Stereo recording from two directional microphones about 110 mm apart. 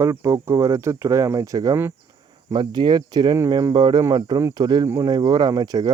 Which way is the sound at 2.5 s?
45° right (ahead or behind).